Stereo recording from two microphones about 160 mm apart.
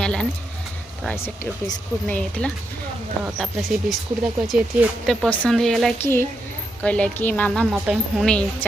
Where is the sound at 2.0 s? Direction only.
10° left (ahead or behind).